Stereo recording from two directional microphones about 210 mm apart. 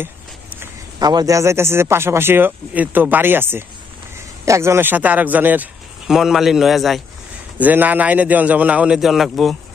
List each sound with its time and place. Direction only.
0.0 s a man's voice: 10° right (ahead or behind)